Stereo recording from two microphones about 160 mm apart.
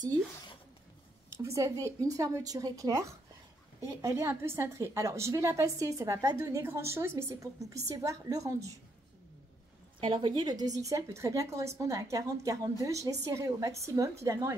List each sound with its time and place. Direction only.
1.4 s a woman's voice: 20° right (ahead or behind)
9.9 s a woman's voice: 30° right (ahead or behind)